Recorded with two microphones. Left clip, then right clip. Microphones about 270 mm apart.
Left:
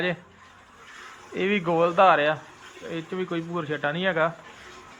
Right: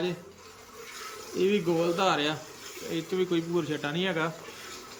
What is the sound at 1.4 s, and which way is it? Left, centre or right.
Speech, centre.